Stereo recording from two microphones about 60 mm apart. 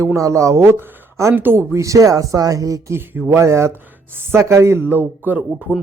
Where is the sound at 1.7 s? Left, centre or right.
Right.